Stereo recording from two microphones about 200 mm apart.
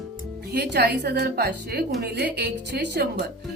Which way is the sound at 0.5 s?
55° right (ahead or behind).